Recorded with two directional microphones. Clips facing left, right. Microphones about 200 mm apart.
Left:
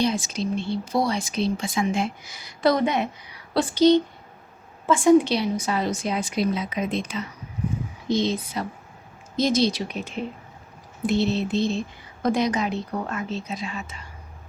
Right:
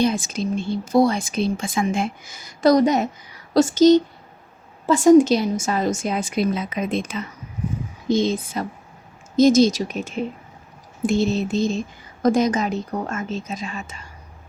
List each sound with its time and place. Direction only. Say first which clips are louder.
0.0 s speech: right 3 dB; 50° right (ahead or behind)